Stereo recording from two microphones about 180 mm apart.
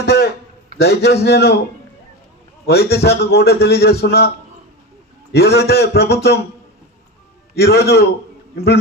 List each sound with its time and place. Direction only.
0.0 s a sound: 65° left (ahead or behind)
0.7 s a man's voice: 65° left (ahead or behind)
2.6 s a man's voice: 60° left (ahead or behind)
5.3 s a man's voice: 65° left (ahead or behind)
7.5 s a man's voice: 65° left (ahead or behind)